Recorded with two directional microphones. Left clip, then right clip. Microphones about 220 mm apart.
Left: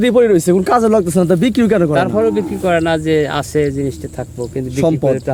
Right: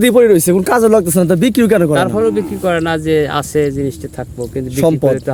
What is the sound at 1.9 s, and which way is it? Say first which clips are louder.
Speech: right 1 dB; 20° right (ahead or behind).